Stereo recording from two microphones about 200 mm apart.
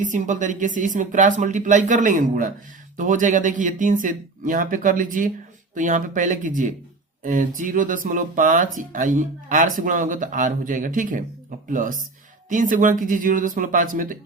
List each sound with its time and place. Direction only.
0.0 s speech: 40° right (ahead or behind)